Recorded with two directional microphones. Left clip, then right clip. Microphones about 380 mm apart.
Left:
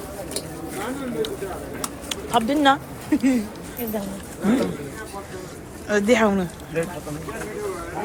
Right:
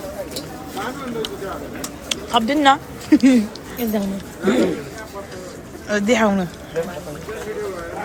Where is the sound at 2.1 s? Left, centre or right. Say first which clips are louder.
Right 3 dB; centre.